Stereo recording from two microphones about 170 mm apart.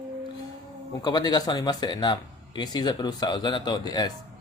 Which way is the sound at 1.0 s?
25° left (ahead or behind).